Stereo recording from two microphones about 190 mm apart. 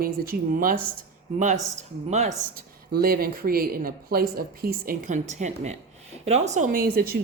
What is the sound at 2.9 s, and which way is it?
Speech, 50° right (ahead or behind).